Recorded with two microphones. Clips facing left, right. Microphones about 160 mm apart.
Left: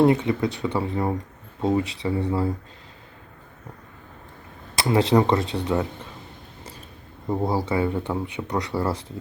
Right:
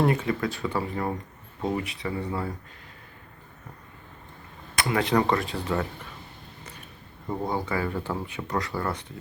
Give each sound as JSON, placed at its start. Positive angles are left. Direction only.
{"t": 0.0, "sound": "speech", "side_deg": 20}
{"t": 4.7, "sound": "speech", "side_deg": 30}
{"t": 7.3, "sound": "speech", "side_deg": 30}
{"t": 8.7, "sound": "speech", "side_deg": 30}